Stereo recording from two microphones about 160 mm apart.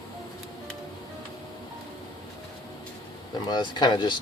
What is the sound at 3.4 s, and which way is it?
Speech, 25° left (ahead or behind).